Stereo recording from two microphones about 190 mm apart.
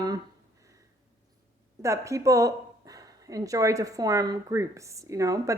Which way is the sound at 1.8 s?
15° right (ahead or behind).